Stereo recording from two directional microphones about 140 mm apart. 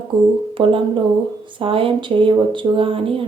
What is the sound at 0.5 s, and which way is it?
Speech, 40° right (ahead or behind).